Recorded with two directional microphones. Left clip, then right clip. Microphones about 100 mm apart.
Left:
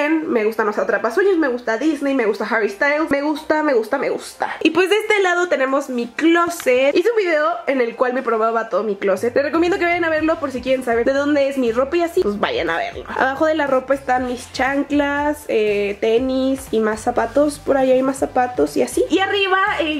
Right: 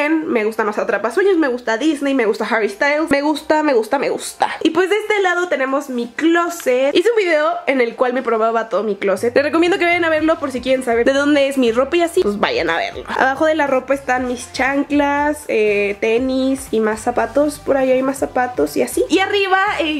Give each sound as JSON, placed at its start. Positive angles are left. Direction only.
{"t": 0.0, "sound": "a woman's voice", "side_deg": -10}
{"t": 4.6, "sound": "a woman's voice", "side_deg": 0}
{"t": 7.0, "sound": "speech", "side_deg": -60}
{"t": 8.4, "sound": "a woman's voice", "side_deg": -10}
{"t": 9.3, "sound": "a woman's voice", "side_deg": -25}
{"t": 13.2, "sound": "a woman's voice", "side_deg": -5}
{"t": 19.1, "sound": "a woman's voice", "side_deg": -15}